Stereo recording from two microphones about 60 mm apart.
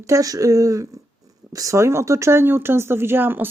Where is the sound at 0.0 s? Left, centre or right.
Right.